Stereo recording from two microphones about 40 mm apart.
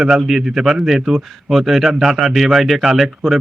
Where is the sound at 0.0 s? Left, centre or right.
Centre.